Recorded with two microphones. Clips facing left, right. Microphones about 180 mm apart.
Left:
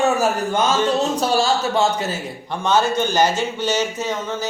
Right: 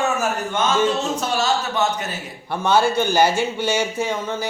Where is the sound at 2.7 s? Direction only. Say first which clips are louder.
Right 1 dB; 10° right (ahead or behind).